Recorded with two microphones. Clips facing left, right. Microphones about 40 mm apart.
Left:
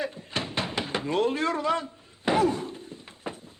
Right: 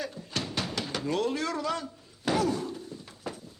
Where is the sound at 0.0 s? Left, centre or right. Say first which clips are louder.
Left 3 dB; left.